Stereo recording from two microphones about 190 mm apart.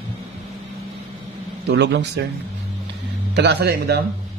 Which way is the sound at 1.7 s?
65° right (ahead or behind).